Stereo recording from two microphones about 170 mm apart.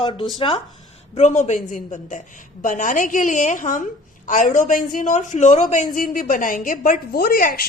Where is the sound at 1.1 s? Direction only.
45° left (ahead or behind).